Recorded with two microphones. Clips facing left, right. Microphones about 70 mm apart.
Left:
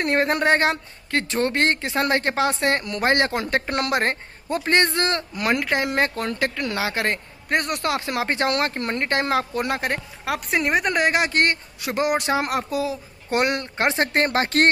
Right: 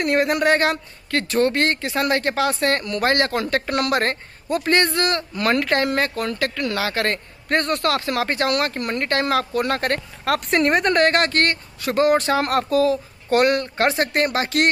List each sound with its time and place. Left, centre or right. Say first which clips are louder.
0.0 s speech: right 2 dB; left
9.8 s speech: right 3 dB; centre; by 14.7 s left